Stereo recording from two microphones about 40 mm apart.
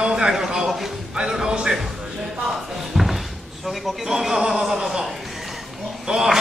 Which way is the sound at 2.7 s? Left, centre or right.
Centre.